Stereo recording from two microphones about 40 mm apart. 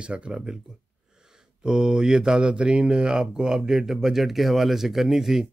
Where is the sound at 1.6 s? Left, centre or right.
Right.